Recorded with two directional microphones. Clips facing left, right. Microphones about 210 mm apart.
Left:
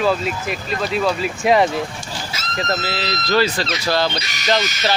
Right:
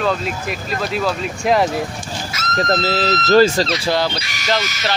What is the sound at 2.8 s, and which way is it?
Speech, 45° right (ahead or behind).